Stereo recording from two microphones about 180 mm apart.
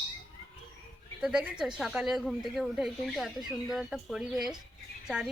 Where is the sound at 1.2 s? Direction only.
5° right (ahead or behind).